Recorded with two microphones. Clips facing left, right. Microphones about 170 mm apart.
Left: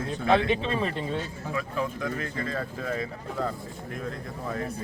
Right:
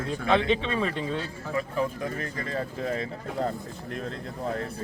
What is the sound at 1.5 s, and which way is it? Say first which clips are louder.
Speech: right 2 dB; 35° right (ahead or behind).